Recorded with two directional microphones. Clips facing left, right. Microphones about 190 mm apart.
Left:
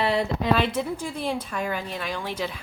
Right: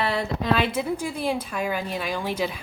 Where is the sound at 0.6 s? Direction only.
5° right (ahead or behind).